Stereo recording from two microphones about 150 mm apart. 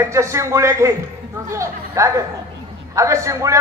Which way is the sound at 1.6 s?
20° right (ahead or behind).